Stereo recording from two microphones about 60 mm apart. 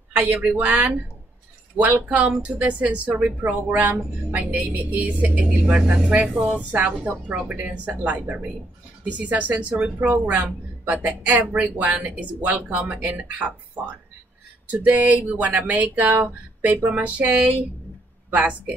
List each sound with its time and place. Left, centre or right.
0.1 s speech: right
6.4 s speech: right
9.9 s speech: right
14.7 s speech: right